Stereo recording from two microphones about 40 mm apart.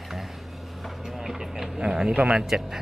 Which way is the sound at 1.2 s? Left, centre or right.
Centre.